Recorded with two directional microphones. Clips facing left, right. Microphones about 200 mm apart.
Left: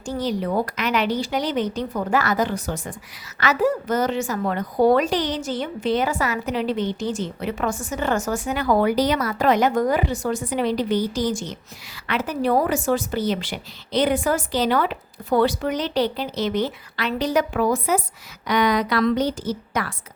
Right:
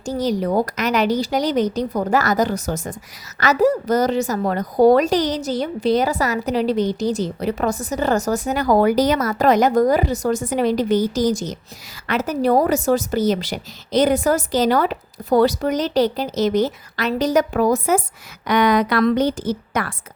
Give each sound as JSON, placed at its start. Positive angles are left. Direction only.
{"t": 0.0, "sound": "a woman's voice", "side_deg": -40}
{"t": 18.4, "sound": "a woman's voice", "side_deg": -55}